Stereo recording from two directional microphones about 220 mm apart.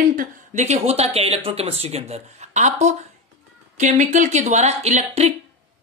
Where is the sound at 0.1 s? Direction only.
35° right (ahead or behind).